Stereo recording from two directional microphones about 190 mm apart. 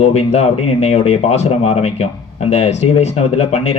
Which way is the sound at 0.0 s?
35° left (ahead or behind).